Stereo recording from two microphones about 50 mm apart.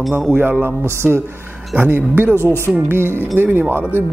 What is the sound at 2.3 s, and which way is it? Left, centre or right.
Speech, right.